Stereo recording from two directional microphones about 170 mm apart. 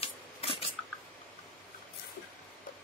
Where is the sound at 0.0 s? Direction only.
35° left (ahead or behind).